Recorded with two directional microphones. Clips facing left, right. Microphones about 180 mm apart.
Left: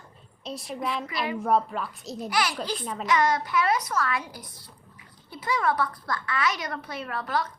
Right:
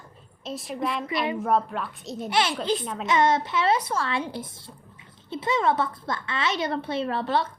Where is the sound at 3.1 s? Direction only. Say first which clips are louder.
Right 2 dB; 25° right (ahead or behind).